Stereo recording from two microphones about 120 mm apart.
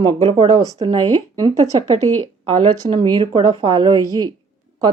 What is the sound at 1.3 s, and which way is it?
Speech, 30° right (ahead or behind).